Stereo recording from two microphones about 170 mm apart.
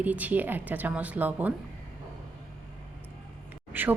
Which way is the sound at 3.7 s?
10° right (ahead or behind).